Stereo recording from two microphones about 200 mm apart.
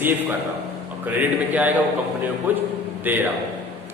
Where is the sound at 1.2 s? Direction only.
10° right (ahead or behind).